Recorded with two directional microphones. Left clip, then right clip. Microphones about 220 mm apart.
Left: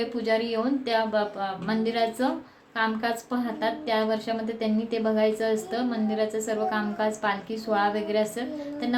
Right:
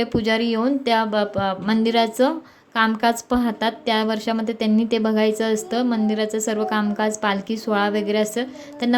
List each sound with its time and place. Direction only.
0.0 s a woman's voice: 40° right (ahead or behind)